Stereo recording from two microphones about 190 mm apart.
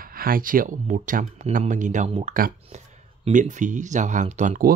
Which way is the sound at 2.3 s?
50° right (ahead or behind).